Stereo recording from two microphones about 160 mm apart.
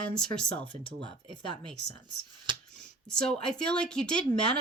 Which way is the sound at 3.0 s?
5° left (ahead or behind).